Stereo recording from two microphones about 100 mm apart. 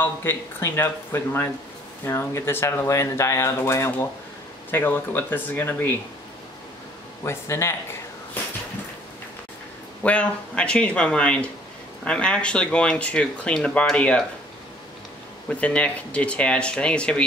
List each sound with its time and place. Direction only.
0.0 s speech: 20° left (ahead or behind)
7.2 s speech: 25° left (ahead or behind)
10.0 s speech: 10° left (ahead or behind)
15.5 s speech: 15° left (ahead or behind)